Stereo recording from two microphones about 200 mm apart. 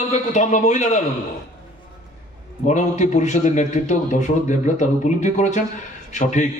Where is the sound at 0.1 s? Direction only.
35° left (ahead or behind).